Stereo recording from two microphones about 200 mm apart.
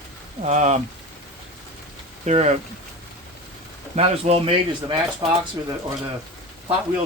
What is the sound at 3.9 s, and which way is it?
Speech, 30° right (ahead or behind).